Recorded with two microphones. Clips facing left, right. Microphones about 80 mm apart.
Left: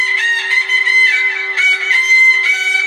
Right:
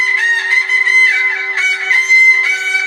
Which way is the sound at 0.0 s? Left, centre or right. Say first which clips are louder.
Right 2 dB; right.